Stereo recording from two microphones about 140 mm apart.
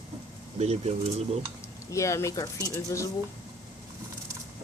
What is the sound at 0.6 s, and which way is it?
Speech, 50° right (ahead or behind).